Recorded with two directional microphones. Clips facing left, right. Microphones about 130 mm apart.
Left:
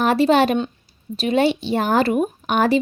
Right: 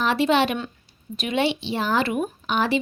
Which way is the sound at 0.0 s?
45° left (ahead or behind).